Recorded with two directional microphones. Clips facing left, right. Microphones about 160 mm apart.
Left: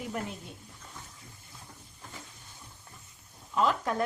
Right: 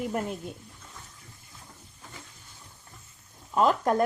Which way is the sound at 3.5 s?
45° right (ahead or behind).